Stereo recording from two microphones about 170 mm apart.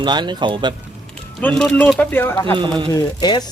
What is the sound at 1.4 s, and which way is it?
Speech, 5° left (ahead or behind).